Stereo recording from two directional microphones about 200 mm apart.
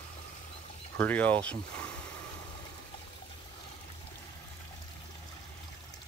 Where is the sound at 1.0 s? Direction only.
10° left (ahead or behind).